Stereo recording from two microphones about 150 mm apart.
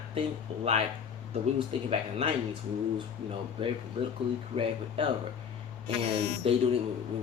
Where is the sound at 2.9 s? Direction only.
35° right (ahead or behind).